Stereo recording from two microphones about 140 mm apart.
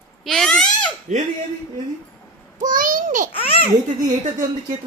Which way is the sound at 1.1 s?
55° right (ahead or behind).